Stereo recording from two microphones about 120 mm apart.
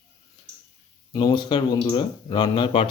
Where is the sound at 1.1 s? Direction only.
40° left (ahead or behind).